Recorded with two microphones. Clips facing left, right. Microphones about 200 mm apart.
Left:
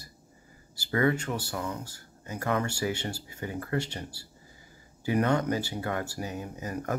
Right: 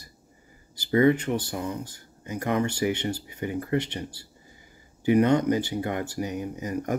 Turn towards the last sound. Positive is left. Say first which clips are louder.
# right 5 dB
turn(degrees=-20)  # may be behind; listen again after turning